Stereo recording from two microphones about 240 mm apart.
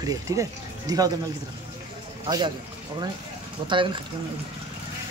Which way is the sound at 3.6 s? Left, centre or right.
Centre.